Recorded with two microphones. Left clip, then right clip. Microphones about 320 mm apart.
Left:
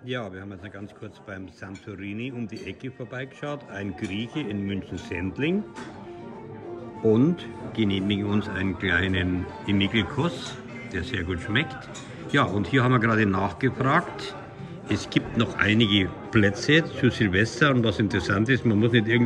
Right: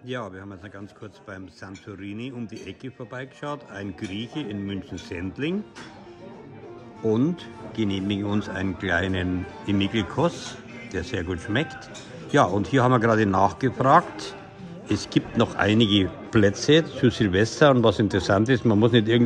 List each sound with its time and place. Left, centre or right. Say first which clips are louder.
2.0 s speech: left 2 dB; centre
7.7 s speech: left 1 dB; centre